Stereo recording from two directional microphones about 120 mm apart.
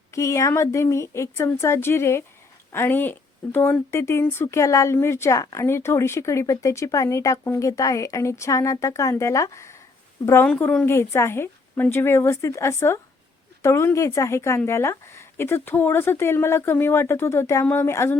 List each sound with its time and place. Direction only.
0.1 s speech: 25° left (ahead or behind)
10.4 s a woman's voice: 10° left (ahead or behind)
10.8 s speech: 20° left (ahead or behind)